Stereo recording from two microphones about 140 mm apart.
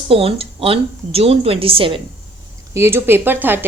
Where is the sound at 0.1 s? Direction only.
40° right (ahead or behind).